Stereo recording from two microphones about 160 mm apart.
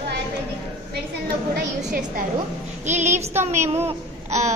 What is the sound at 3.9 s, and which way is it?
Babbling, 45° right (ahead or behind).